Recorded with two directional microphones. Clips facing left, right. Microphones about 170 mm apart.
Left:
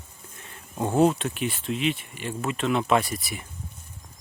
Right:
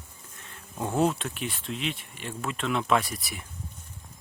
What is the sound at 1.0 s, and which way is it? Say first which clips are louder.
Speech: left 5 dB; centre (ahead or behind).